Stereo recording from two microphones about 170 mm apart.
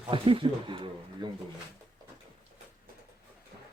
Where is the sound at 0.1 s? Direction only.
30° right (ahead or behind).